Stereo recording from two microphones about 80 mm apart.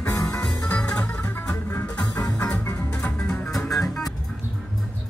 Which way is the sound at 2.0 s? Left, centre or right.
Left.